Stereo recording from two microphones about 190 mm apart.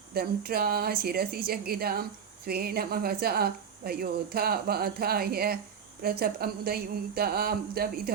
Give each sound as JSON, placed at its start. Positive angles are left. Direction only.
{"t": 0.1, "sound": "speech", "side_deg": -55}